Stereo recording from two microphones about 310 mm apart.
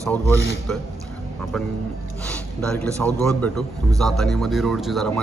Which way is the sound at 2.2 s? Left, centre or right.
Centre.